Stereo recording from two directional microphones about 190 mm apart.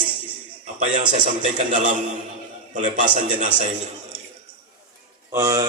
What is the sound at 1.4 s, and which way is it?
A man's voice, 40° right (ahead or behind).